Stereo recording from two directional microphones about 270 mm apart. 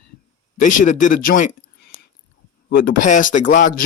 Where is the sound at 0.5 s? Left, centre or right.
Left.